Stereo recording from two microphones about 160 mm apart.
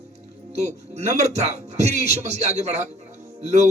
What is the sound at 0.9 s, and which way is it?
A man's voice, 45° right (ahead or behind).